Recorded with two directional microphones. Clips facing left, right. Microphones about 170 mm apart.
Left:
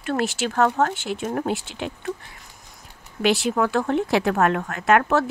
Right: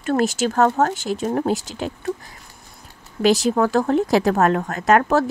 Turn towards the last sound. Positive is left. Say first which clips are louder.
# right 2 dB
turn(degrees=-40)  # may be behind; listen again after turning